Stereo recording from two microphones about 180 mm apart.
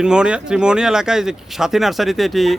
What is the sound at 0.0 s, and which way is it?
Speech, 5° right (ahead or behind).